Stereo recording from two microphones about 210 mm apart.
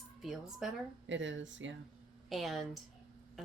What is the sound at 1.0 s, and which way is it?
Speech, 60° right (ahead or behind).